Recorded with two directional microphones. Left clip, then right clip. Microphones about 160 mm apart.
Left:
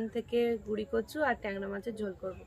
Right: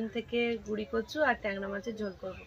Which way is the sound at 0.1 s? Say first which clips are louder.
Left 2 dB; 30° left (ahead or behind).